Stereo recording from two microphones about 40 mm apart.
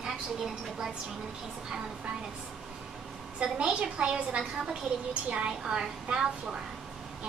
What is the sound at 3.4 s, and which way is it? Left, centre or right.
A woman's voice, right.